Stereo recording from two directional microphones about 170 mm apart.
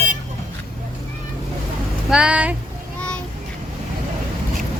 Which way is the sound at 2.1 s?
5° right (ahead or behind).